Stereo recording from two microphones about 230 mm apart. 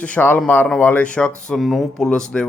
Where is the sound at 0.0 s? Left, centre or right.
Centre.